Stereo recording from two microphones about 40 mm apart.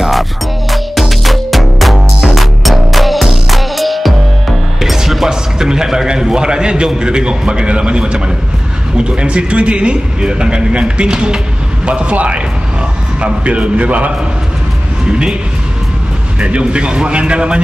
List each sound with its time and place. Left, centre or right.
0.7 s music: centre
4.9 s a sound: centre
7.0 s a man's voice: right
15.0 s speech: right
16.3 s speech: right